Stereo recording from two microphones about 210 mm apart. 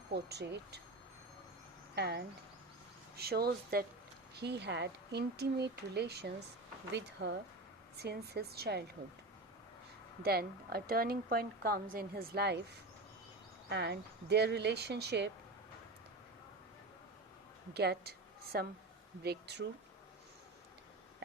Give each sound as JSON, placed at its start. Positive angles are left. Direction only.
{"t": 0.1, "sound": "a woman's voice", "side_deg": -50}
{"t": 2.0, "sound": "a woman's voice", "side_deg": -50}
{"t": 10.2, "sound": "a woman's voice", "side_deg": -45}
{"t": 13.7, "sound": "a woman's voice", "side_deg": -55}
{"t": 17.7, "sound": "a woman's voice", "side_deg": -50}